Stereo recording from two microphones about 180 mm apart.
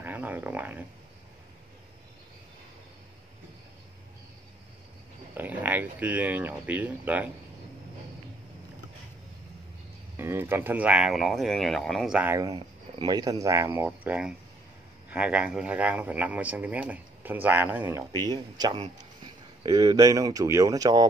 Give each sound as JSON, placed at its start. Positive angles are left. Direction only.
{"t": 0.0, "sound": "a sound", "side_deg": -10}
{"t": 5.4, "sound": "speech", "side_deg": -10}
{"t": 10.1, "sound": "speech", "side_deg": -10}
{"t": 12.2, "sound": "speech", "side_deg": -15}
{"t": 18.2, "sound": "speech", "side_deg": -25}